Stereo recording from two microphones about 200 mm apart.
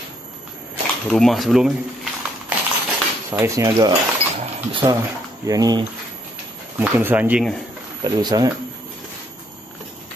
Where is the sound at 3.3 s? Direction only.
15° right (ahead or behind).